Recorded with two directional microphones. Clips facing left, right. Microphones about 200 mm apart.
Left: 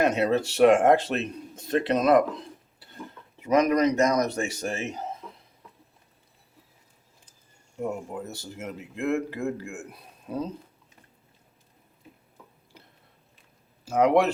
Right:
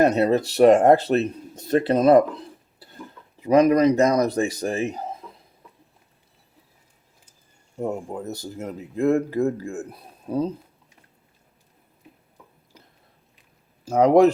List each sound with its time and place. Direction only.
0.0 s speech: 40° right (ahead or behind)
3.4 s speech: 30° right (ahead or behind)
7.8 s speech: 40° right (ahead or behind)
13.8 s speech: 35° right (ahead or behind)